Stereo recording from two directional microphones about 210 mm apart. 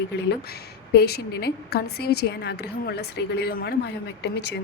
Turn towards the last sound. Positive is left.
turn(degrees=55)  # may be behind; listen again after turning